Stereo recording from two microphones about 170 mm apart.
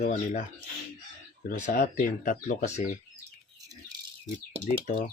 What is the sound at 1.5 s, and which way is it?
Speech, 45° left (ahead or behind).